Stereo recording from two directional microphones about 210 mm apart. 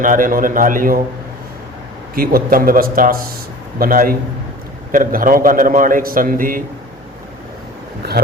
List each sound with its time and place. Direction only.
0.0 s a man's voice: 40° right (ahead or behind)
2.1 s a man's voice: 45° right (ahead or behind)